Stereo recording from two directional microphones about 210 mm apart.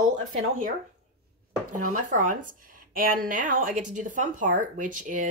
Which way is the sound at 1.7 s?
35° right (ahead or behind).